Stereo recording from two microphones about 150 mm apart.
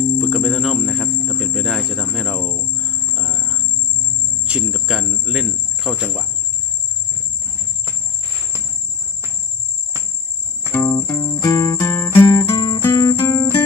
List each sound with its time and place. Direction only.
0.2 s cricket: centre (ahead or behind)
3.2 s a sound: 5° right (ahead or behind)
4.4 s jingle bell: 5° right (ahead or behind)
10.7 s music: 15° left (ahead or behind)